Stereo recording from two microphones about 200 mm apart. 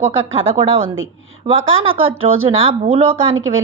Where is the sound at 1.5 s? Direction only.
90° right.